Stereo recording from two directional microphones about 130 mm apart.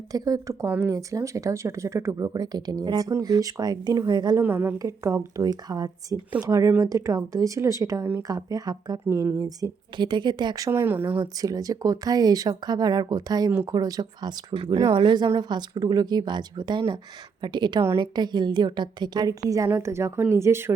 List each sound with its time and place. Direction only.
0.1 s speech: 25° right (ahead or behind)
4.4 s a woman's voice: 15° right (ahead or behind)
11.2 s a woman's voice: 30° right (ahead or behind)